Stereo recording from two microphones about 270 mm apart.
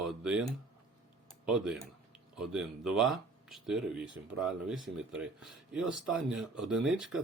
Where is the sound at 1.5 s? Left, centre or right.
Centre.